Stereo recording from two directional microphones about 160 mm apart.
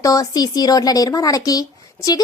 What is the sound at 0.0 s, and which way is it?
A woman's voice, 20° left (ahead or behind).